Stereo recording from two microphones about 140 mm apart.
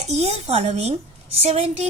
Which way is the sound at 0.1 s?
50° right (ahead or behind).